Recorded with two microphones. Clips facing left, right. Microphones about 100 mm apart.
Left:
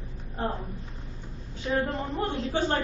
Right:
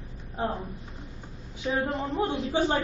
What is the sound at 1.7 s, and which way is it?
Speech, 15° right (ahead or behind).